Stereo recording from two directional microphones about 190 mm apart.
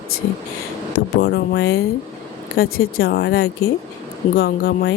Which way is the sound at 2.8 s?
55° left (ahead or behind).